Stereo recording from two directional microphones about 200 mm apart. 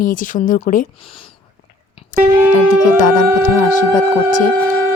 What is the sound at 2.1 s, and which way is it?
Speech, 40° left (ahead or behind).